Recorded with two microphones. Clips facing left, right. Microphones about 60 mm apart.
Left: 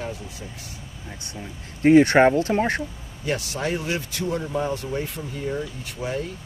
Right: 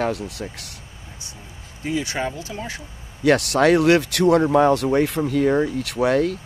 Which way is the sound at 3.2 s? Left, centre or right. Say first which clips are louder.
Right 10 dB; right.